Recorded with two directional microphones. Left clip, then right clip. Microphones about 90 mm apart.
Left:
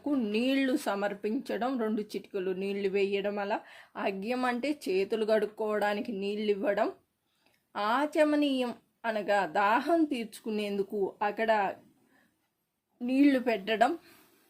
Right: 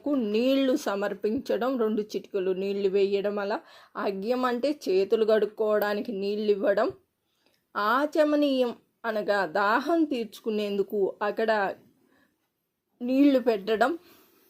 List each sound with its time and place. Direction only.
0.0 s speech: 10° right (ahead or behind)
7.9 s speech: 15° right (ahead or behind)
13.0 s speech: 15° right (ahead or behind)